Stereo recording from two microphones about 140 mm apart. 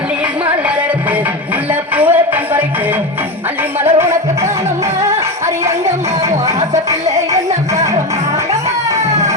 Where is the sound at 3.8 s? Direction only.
15° right (ahead or behind).